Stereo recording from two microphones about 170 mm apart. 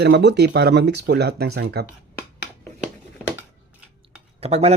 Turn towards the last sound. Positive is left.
turn(degrees=-40)  # may be behind; listen again after turning